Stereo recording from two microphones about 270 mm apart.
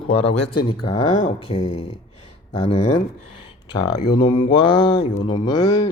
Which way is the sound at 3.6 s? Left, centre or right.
Centre.